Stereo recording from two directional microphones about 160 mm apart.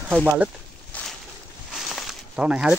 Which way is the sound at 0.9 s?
10° left (ahead or behind).